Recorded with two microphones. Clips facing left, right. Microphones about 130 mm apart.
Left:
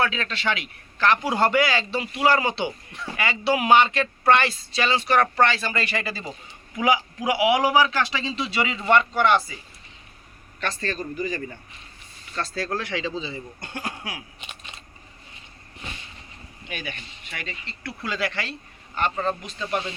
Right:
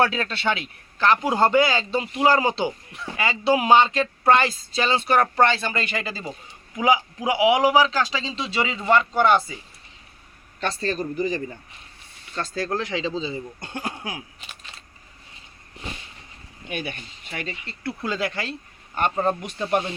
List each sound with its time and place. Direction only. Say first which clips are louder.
0.0 s a man's voice: right 3 dB; 40° right (ahead or behind)
2.9 s speech: even; centre (ahead or behind)
3.2 s a man's voice: right 2 dB; 25° right (ahead or behind)
10.6 s a man's voice: right 3 dB; 30° right (ahead or behind)
12.5 s a man's voice: right 3 dB; 20° right (ahead or behind)
16.6 s a man's voice: right 4 dB; 45° right (ahead or behind); by 19.4 s 20° right (ahead or behind)
19.4 s speech: right 5 dB; 60° right (ahead or behind)